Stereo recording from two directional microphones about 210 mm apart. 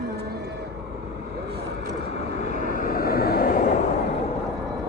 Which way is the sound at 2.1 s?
35° left (ahead or behind).